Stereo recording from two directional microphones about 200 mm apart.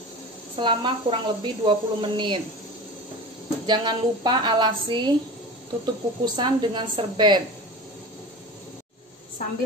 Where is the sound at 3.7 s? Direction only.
20° right (ahead or behind).